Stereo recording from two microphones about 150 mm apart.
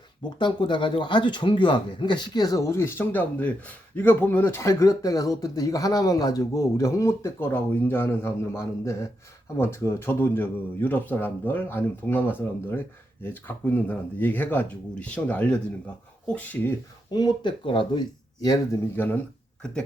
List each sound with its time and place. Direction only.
0.3 s speech: 30° left (ahead or behind); by 16.7 s 10° left (ahead or behind)
17.1 s speech: 30° left (ahead or behind); by 19.2 s 15° left (ahead or behind)